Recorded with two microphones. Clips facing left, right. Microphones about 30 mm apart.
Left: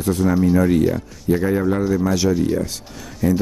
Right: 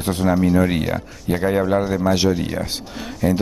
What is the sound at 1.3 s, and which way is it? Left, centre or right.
Speech, right.